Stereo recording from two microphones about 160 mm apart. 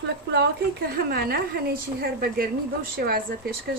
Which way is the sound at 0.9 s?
75° right (ahead or behind).